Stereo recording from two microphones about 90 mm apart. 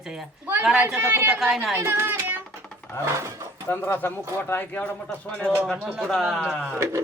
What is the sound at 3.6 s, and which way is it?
Speech, 20° left (ahead or behind).